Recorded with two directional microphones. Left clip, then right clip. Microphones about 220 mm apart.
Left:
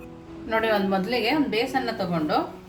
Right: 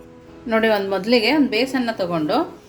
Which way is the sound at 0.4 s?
25° right (ahead or behind).